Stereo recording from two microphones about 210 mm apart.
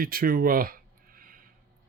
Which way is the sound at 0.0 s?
45° right (ahead or behind).